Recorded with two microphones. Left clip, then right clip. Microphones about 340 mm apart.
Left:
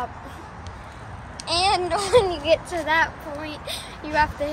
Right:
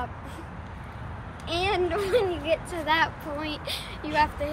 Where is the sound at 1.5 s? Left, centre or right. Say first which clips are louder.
Left 6 dB; left.